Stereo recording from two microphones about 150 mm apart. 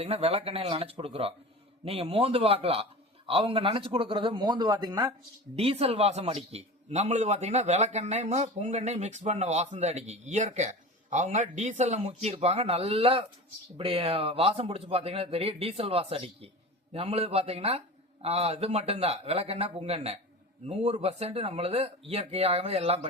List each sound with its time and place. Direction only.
0.0 s a man's voice: 40° right (ahead or behind); by 5.1 s 25° right (ahead or behind)
5.5 s a man's voice: 40° right (ahead or behind)